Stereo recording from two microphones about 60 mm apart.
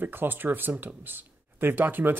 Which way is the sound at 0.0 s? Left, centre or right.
Right.